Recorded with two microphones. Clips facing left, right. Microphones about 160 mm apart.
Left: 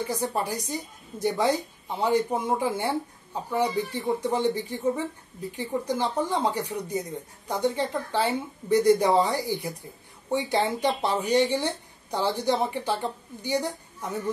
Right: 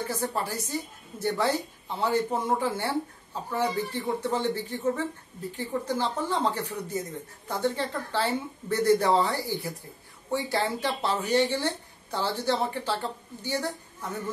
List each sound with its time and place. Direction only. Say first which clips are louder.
0.0 s speech: left 2 dB; 15° left (ahead or behind)